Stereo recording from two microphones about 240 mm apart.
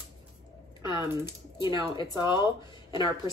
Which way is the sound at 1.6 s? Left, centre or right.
Centre.